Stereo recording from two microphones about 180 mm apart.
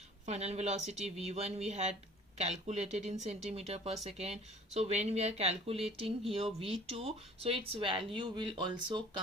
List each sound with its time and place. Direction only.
0.3 s speech: 35° right (ahead or behind)